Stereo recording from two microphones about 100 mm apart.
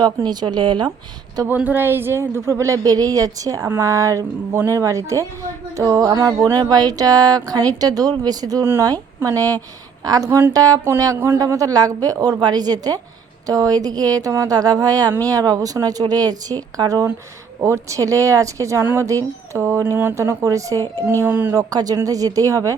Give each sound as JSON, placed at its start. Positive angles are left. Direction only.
{"t": 0.0, "sound": "a woman's voice", "side_deg": -45}
{"t": 1.5, "sound": "speech", "side_deg": -20}
{"t": 8.6, "sound": "speech", "side_deg": -25}
{"t": 8.9, "sound": "a woman's voice", "side_deg": -35}
{"t": 21.2, "sound": "speech", "side_deg": -20}
{"t": 21.5, "sound": "speech", "side_deg": -40}